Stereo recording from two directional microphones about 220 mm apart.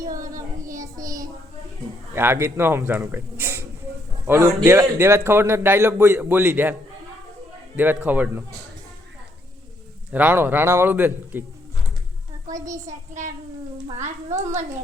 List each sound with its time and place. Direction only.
0.8 s child singing: 15° right (ahead or behind)
2.1 s a man's voice: 10° right (ahead or behind)
7.8 s a man's voice: 5° right (ahead or behind)
10.1 s a man's voice: 10° right (ahead or behind)
13.8 s speech: 30° right (ahead or behind)